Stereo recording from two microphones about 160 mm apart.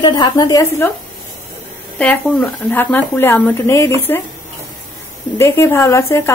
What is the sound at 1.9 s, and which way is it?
Speech, 10° left (ahead or behind).